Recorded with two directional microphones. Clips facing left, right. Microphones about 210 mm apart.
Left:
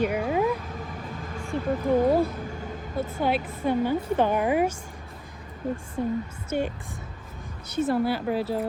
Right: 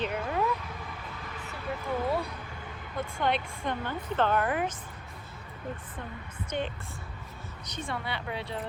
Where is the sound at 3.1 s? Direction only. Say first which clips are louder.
Left 3 dB; 5° left (ahead or behind).